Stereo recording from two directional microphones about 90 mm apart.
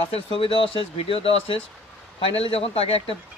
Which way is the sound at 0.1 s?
75° left (ahead or behind).